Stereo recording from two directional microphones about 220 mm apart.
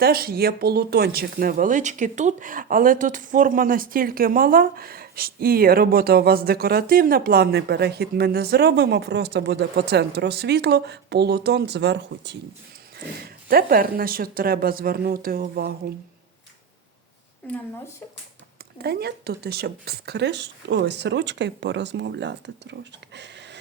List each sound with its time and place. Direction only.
0.0 s speech: 40° right (ahead or behind)
17.4 s speech: 5° left (ahead or behind)
18.8 s speech: 45° right (ahead or behind)